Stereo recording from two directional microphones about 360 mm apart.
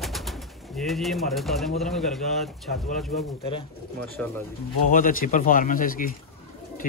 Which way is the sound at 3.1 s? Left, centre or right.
Centre.